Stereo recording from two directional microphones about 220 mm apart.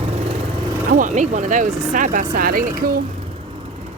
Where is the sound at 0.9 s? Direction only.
35° right (ahead or behind).